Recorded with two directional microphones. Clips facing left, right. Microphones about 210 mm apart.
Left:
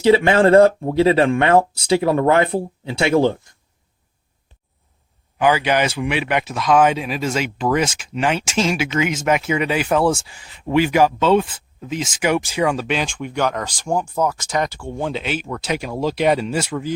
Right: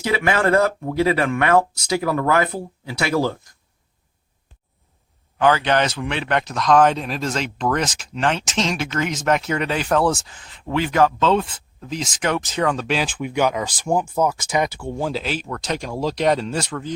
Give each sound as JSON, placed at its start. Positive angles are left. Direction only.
{"t": 0.0, "sound": "speech", "side_deg": 30}
{"t": 5.4, "sound": "speech", "side_deg": 10}